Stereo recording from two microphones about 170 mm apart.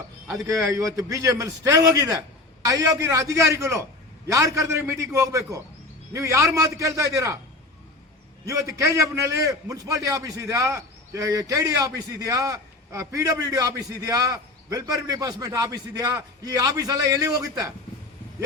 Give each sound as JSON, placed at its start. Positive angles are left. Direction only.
{"t": 0.4, "sound": "a man's voice", "side_deg": -20}
{"t": 8.4, "sound": "a man's voice", "side_deg": -20}